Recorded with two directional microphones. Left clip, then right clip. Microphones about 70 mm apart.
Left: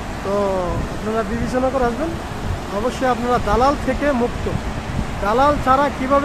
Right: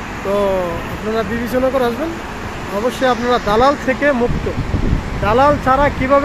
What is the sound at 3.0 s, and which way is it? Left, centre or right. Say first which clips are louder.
Speech: right 3 dB; right.